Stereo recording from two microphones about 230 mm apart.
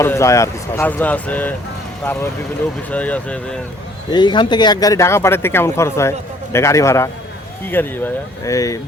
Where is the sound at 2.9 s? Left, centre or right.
Centre.